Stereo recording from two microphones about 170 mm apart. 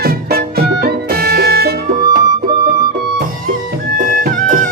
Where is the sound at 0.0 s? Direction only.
65° right (ahead or behind).